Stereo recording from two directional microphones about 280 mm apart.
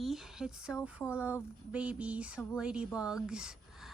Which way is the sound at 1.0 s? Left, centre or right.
Centre.